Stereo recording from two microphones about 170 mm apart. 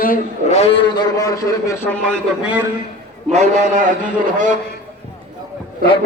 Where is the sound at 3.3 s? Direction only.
45° right (ahead or behind).